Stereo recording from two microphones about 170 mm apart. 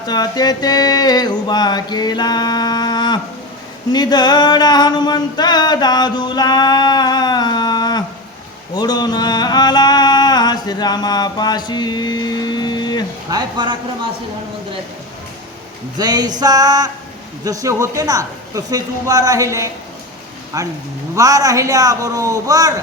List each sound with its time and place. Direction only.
0.1 s a sound: 25° left (ahead or behind)
13.3 s speech: 25° right (ahead or behind)
16.0 s speech: 25° right (ahead or behind)